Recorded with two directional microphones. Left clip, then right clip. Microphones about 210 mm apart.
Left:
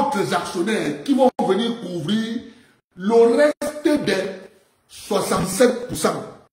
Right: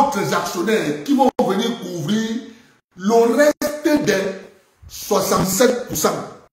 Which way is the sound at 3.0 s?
5° right (ahead or behind).